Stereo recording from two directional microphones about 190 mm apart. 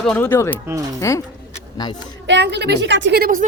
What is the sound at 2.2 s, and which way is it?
A woman's voice, 65° right (ahead or behind).